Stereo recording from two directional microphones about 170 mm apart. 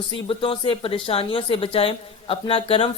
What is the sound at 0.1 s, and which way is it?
Speech, 30° left (ahead or behind).